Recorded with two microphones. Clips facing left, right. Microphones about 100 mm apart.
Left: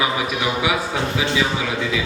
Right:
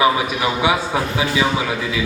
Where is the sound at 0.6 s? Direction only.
30° right (ahead or behind).